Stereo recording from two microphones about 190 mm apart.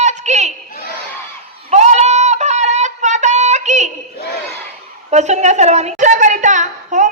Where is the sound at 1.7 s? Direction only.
35° right (ahead or behind).